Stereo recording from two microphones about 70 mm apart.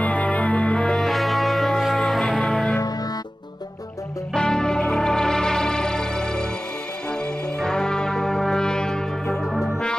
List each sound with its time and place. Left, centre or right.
0.0 s music: centre
1.0 s music: centre
4.3 s music: centre
7.6 s brass instrument: centre